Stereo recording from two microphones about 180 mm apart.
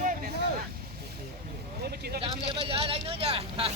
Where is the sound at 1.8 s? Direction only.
60° right (ahead or behind).